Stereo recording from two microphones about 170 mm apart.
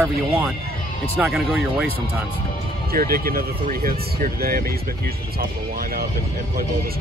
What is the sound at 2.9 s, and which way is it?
Speech, 60° right (ahead or behind).